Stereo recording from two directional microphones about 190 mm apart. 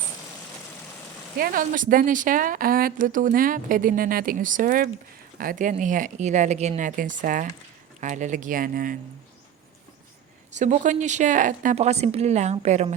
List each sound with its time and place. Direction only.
1.4 s speech: 50° right (ahead or behind)
10.6 s speech: 40° right (ahead or behind)